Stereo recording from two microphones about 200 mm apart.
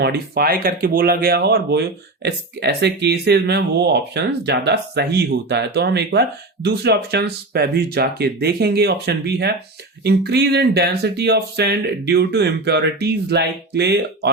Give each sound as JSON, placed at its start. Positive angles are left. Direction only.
{"t": 0.0, "sound": "speech", "side_deg": -50}